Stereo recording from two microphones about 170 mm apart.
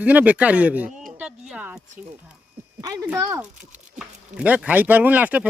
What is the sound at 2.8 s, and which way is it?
Speech, 20° right (ahead or behind).